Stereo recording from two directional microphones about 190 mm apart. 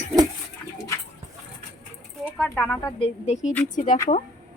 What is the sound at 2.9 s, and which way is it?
Speech, 30° left (ahead or behind).